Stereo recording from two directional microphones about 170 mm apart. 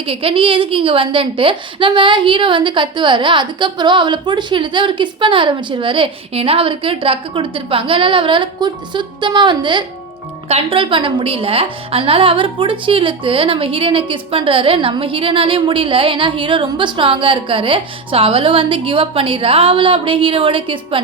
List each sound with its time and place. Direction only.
0.0 s a woman's voice: 30° right (ahead or behind)